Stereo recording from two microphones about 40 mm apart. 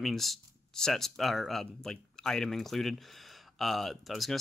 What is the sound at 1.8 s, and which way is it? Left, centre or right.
Speech, centre.